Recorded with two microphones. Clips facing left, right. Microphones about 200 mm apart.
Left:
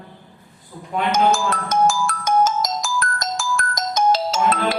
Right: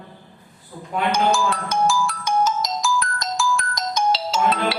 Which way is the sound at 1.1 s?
45° left (ahead or behind).